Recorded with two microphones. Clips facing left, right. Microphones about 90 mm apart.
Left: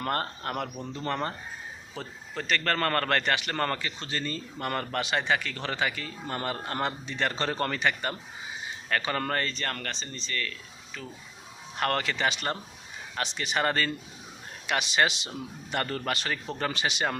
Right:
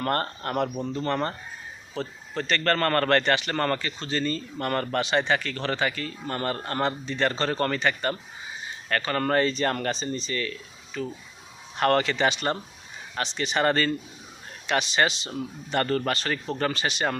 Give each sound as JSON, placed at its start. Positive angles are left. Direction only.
{"t": 0.0, "sound": "a man's voice", "side_deg": 5}
{"t": 9.2, "sound": "a man's voice", "side_deg": -5}
{"t": 9.6, "sound": "a man's voice", "side_deg": -15}